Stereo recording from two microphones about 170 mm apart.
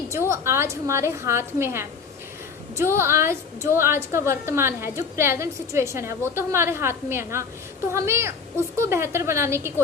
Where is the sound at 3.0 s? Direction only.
15° right (ahead or behind).